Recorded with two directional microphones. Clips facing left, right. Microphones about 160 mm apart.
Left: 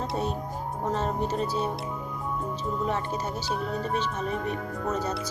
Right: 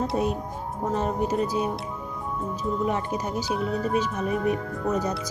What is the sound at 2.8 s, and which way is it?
Speech, 15° right (ahead or behind).